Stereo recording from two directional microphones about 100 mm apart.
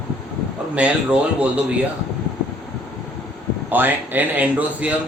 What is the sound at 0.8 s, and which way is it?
Speech, 10° right (ahead or behind).